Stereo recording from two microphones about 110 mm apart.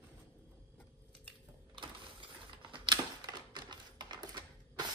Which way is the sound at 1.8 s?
45° right (ahead or behind).